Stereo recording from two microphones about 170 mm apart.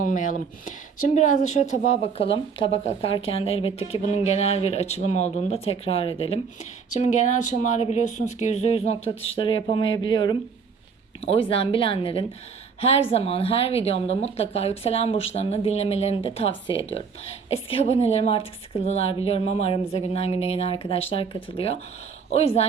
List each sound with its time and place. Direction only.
0.0 s speech: 50° left (ahead or behind)